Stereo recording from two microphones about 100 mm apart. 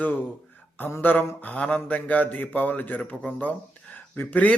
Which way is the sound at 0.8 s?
20° left (ahead or behind).